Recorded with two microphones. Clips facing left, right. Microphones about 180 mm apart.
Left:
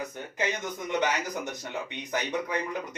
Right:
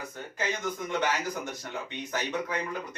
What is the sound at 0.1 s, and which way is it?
A man's voice, 20° left (ahead or behind).